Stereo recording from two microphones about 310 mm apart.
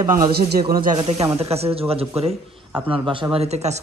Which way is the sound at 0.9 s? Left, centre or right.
Centre.